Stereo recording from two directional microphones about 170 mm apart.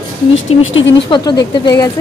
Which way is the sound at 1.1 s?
25° left (ahead or behind).